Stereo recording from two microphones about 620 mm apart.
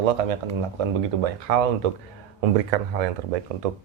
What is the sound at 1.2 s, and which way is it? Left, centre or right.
Speech, right.